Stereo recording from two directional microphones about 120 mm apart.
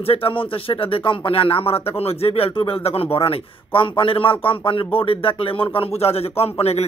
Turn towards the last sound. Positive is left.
turn(degrees=60)  # may be behind; listen again after turning